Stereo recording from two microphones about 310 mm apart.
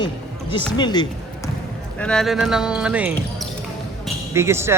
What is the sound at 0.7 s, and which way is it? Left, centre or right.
Basketball bounce, centre.